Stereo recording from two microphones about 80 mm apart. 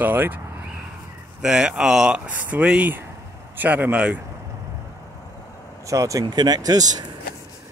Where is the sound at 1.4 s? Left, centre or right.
Centre.